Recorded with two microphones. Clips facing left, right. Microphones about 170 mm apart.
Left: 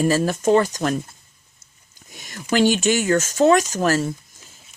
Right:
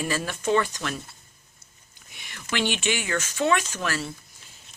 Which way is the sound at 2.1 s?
40° left (ahead or behind).